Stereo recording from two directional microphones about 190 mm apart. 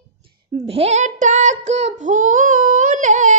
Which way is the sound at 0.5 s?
30° right (ahead or behind).